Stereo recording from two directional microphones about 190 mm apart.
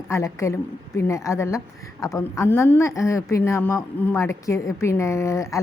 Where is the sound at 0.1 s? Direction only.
15° left (ahead or behind).